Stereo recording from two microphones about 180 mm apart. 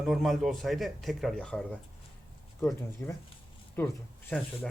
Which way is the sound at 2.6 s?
15° left (ahead or behind).